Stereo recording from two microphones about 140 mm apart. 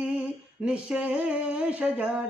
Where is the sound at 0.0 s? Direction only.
10° right (ahead or behind).